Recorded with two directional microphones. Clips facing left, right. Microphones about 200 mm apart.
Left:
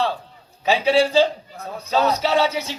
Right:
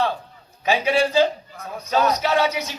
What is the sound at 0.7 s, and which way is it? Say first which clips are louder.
Speech: left 2 dB; 15° right (ahead or behind).